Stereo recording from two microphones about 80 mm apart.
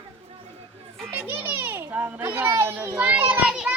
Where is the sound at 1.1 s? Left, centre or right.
Right.